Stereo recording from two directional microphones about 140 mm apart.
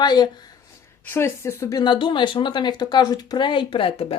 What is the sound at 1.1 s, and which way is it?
Speech, 15° left (ahead or behind).